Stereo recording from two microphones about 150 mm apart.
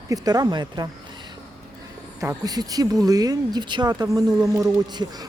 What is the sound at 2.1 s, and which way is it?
Speech, 25° right (ahead or behind).